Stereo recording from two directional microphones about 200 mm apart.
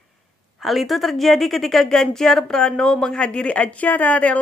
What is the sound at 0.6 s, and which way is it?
A woman's voice, centre (ahead or behind).